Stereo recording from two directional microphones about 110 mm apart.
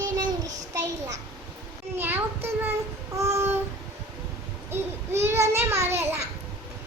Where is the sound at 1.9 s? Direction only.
20° right (ahead or behind).